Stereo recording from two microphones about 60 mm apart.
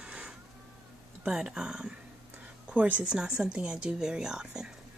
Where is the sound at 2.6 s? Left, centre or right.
Right.